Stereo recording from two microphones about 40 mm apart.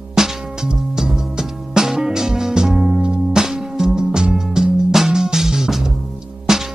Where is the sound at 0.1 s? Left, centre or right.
Centre.